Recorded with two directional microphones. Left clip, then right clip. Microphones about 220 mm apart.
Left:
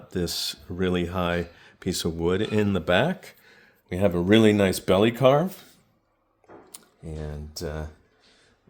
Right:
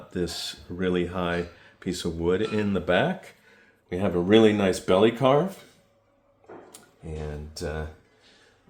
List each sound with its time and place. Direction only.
0.1 s speech: 45° left (ahead or behind)
6.7 s speech: 45° left (ahead or behind)